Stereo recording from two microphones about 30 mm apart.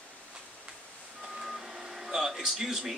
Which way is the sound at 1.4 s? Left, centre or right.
Centre.